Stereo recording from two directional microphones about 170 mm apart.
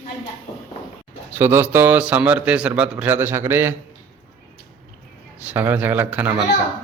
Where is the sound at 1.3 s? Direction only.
10° right (ahead or behind).